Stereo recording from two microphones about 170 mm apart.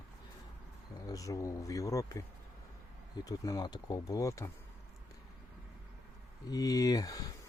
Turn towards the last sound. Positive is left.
turn(degrees=20)  # may be behind; listen again after turning